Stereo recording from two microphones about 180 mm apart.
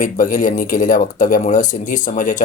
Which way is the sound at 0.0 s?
50° left (ahead or behind).